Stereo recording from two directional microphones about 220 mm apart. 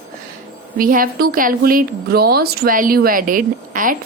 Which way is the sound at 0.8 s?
40° right (ahead or behind).